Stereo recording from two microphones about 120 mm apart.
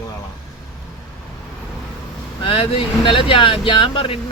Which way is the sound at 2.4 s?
50° left (ahead or behind).